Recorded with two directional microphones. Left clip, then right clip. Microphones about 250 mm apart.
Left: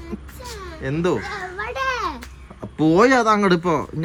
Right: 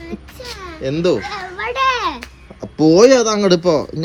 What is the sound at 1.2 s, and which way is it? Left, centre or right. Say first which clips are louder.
Children playing: right 4 dB; right.